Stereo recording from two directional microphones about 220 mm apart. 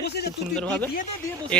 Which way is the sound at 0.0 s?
50° left (ahead or behind).